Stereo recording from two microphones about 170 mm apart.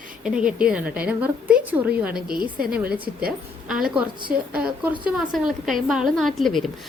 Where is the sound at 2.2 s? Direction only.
60° right (ahead or behind).